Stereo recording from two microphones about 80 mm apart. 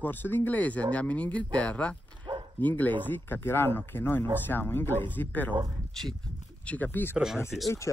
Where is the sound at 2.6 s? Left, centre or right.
Left.